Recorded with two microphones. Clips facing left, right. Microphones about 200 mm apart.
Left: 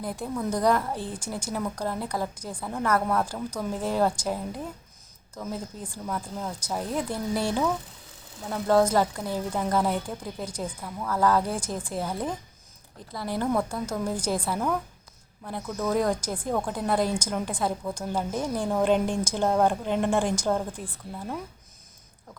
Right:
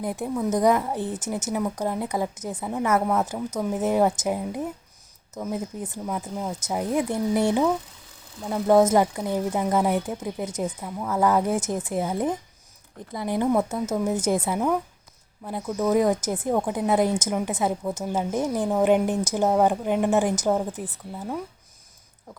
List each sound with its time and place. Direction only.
0.0 s a woman's voice: 20° right (ahead or behind)
20.3 s a woman's voice: 20° right (ahead or behind)